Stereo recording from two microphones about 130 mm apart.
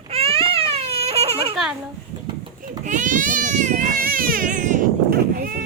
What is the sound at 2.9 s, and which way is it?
Baby cry, 80° right.